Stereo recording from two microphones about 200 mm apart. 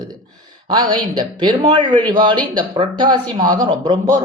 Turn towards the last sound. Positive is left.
turn(degrees=-20)  # may be behind; listen again after turning